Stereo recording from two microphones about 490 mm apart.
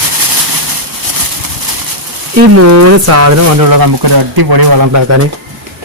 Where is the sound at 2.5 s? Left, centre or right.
Right.